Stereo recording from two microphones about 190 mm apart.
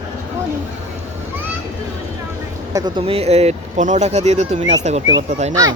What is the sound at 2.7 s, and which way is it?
Speech, 25° right (ahead or behind).